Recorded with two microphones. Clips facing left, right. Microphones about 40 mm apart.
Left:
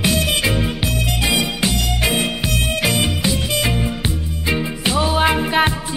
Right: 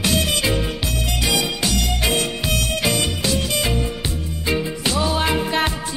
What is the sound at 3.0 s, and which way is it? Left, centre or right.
Music, left.